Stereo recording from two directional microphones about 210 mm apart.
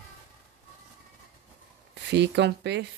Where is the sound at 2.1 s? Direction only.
55° right (ahead or behind).